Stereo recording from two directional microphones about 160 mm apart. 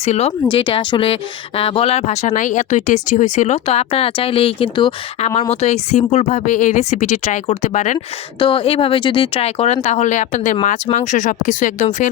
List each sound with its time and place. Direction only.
0.0 s speech: 40° left (ahead or behind)
0.5 s speech: 30° left (ahead or behind); by 7.9 s 50° left (ahead or behind)
7.9 s speech: 30° left (ahead or behind); by 12.0 s 50° left (ahead or behind)